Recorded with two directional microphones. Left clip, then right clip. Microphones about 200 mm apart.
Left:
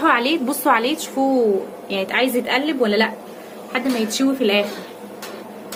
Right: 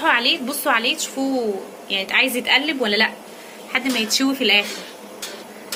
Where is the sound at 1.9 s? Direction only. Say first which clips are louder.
Right 1 dB; 35° left (ahead or behind).